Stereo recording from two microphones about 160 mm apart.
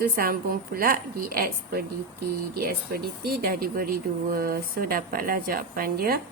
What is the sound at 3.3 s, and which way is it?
Speech, 70° right (ahead or behind).